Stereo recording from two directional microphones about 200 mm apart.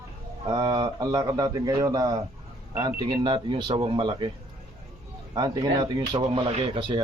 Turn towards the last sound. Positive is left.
turn(degrees=-25)  # may be behind; listen again after turning